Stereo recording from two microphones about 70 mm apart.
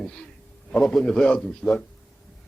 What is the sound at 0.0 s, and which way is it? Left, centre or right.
A man's voice, centre.